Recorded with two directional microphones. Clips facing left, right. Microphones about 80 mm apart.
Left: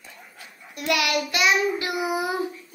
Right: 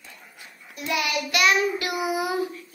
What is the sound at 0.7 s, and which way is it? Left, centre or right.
Child singing, left.